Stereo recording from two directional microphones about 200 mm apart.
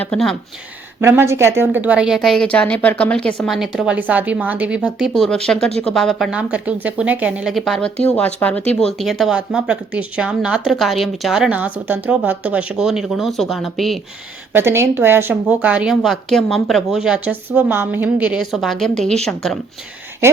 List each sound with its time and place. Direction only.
0.0 s a woman's voice: 5° left (ahead or behind)
1.0 s a woman's voice: 15° right (ahead or behind)
14.5 s a woman's voice: 10° right (ahead or behind)